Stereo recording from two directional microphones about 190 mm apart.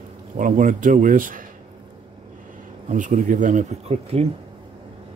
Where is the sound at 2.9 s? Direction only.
40° right (ahead or behind).